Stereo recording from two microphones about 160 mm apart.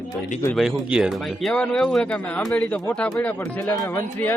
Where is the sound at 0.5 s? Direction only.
5° right (ahead or behind).